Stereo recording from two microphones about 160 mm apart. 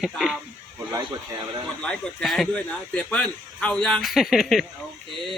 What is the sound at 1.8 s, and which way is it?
Speech, 5° left (ahead or behind).